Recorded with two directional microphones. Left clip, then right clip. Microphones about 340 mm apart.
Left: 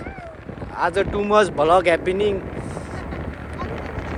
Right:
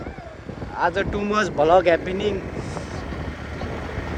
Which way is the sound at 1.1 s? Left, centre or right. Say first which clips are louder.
Left 4 dB; centre.